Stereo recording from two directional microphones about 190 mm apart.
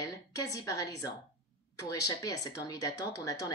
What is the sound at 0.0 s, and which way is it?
A woman's voice, 15° left (ahead or behind).